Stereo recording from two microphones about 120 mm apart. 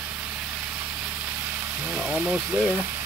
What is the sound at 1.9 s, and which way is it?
Speech, 10° right (ahead or behind).